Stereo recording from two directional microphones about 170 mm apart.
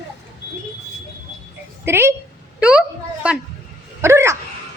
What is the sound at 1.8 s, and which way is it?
A woman's voice, 15° right (ahead or behind).